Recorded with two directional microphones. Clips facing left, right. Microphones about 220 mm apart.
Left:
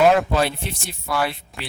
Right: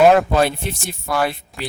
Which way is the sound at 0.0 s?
50° right (ahead or behind).